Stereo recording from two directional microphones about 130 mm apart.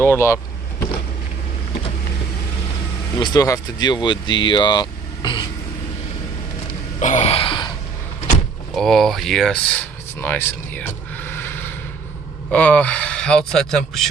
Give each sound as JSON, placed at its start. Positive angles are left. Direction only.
{"t": 0.0, "sound": "speech", "side_deg": 20}
{"t": 3.2, "sound": "speech", "side_deg": 35}
{"t": 7.0, "sound": "a sound", "side_deg": 65}
{"t": 8.7, "sound": "speech", "side_deg": 0}